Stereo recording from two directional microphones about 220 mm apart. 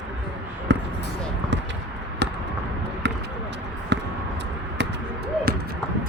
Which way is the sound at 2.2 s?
50° right (ahead or behind).